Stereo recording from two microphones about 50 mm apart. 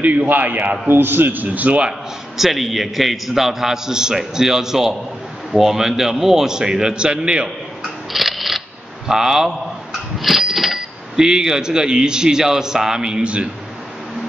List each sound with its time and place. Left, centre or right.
0.3 s a man's voice: right
2.3 s speech: centre
8.1 s camera: centre
10.1 s speech: centre; by 13.5 s right